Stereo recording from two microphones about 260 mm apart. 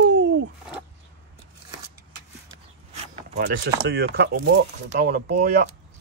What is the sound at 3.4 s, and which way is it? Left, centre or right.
Speech, right.